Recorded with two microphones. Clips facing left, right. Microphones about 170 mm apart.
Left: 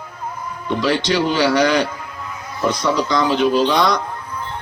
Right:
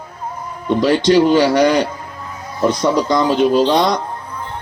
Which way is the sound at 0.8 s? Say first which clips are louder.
Right 6 dB; 50° right (ahead or behind).